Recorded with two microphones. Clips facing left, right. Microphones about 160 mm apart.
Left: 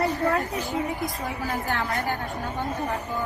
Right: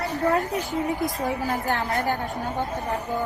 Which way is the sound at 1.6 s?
40° right (ahead or behind).